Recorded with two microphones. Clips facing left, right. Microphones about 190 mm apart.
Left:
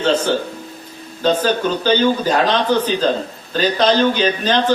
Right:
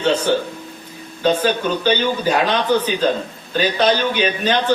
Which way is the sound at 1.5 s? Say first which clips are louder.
Left 1 dB; 10° right (ahead or behind).